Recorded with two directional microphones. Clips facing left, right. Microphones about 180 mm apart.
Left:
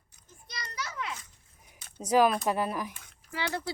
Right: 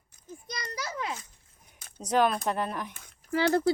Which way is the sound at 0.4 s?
45° right (ahead or behind).